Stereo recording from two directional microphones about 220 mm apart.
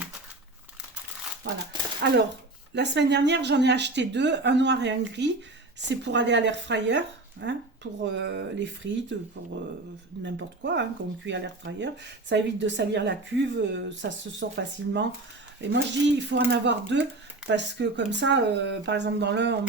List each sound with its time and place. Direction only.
2.0 s a woman's voice: 50° right (ahead or behind)
10.2 s a woman's voice: 55° right (ahead or behind)